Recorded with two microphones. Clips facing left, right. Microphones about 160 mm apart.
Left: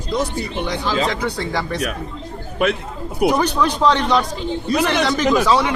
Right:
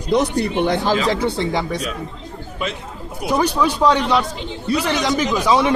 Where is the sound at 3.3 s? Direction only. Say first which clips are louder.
Even; 10° right (ahead or behind).